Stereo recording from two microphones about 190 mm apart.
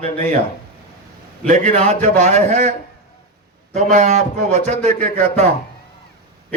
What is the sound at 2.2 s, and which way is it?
Speech, 40° right (ahead or behind).